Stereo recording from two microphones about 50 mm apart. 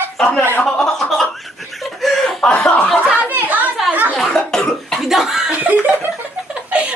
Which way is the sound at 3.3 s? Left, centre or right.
Right.